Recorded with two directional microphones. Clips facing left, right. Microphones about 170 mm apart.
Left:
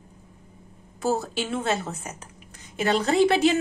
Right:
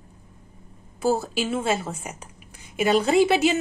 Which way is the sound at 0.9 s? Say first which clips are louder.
Right 2 dB; 5° right (ahead or behind).